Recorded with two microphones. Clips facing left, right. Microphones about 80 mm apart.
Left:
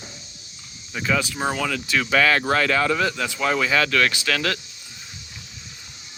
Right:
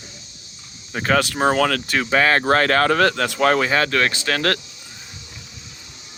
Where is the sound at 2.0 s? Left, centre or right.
Right.